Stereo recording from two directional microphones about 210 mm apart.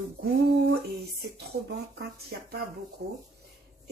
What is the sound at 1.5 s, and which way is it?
Speech, 50° right (ahead or behind).